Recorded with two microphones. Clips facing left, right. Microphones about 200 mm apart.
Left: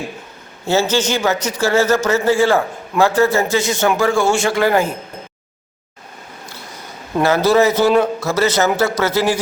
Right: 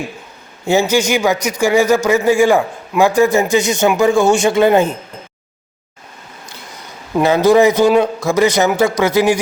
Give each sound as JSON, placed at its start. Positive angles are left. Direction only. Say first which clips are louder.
{"t": 0.7, "sound": "a man's voice", "louder": "right 3 dB", "side_deg": -15}
{"t": 7.2, "sound": "a man's voice", "louder": "right 3 dB", "side_deg": -15}